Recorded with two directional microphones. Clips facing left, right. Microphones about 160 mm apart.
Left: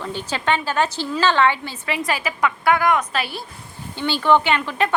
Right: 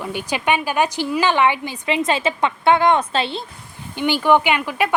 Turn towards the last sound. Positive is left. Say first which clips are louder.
# right 1 dB
turn(degrees=-10)  # may be behind; listen again after turning